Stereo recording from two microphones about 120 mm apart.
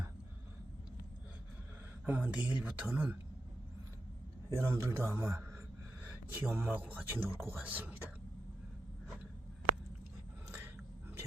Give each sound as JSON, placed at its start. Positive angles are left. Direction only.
{"t": 2.0, "sound": "speech", "side_deg": -10}
{"t": 4.5, "sound": "a man's voice", "side_deg": -20}